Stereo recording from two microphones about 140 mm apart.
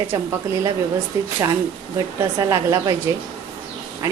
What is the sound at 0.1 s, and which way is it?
Speech, 20° right (ahead or behind).